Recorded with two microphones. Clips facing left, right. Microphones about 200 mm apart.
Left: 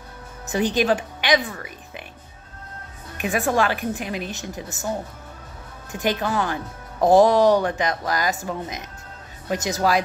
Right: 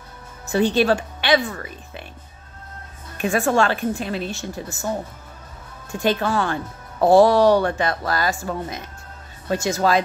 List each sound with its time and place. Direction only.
0.5 s a woman's voice: 15° left (ahead or behind)
3.2 s speech: 15° left (ahead or behind)
5.9 s speech: 20° left (ahead or behind)